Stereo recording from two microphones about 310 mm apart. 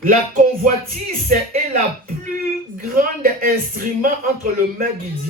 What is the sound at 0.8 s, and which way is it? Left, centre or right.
Speech, right.